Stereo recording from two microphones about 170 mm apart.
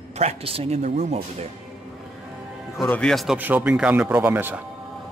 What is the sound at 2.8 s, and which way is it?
Speech, 5° left (ahead or behind).